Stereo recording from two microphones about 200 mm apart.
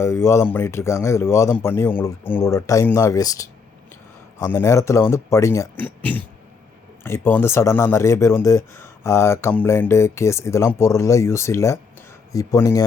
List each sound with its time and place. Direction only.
0.0 s speech: 10° left (ahead or behind)